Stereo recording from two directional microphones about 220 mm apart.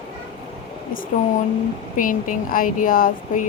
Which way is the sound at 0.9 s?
40° left (ahead or behind).